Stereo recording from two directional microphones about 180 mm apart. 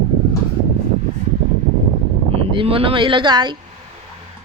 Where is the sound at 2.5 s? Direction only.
30° right (ahead or behind).